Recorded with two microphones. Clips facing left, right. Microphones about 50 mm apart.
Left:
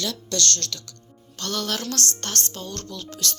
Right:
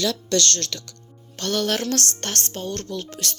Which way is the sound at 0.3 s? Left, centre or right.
Right.